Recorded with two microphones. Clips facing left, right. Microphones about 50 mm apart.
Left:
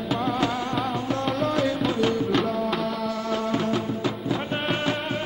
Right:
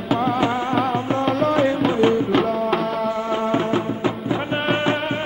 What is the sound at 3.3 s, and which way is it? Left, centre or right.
Music, right.